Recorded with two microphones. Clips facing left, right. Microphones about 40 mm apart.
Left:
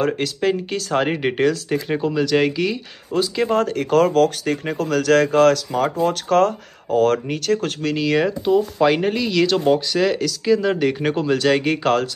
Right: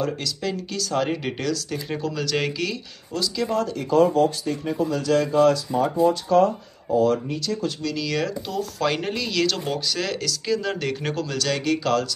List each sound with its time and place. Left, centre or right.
0.0 s speech: left
2.2 s speech: centre
3.1 s speech: left
7.9 s speech: left
8.2 s speech: left
11.1 s speech: left